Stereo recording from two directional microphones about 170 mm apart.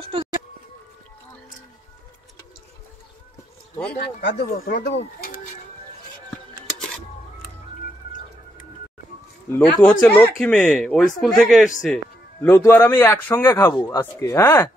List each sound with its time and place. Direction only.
0.1 s speech: 35° right (ahead or behind)
3.9 s speech: 75° left (ahead or behind)
9.5 s a man's voice: 10° left (ahead or behind)
12.4 s a man's voice: 15° left (ahead or behind)